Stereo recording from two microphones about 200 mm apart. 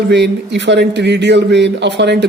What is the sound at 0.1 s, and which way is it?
A man's voice, 60° right (ahead or behind).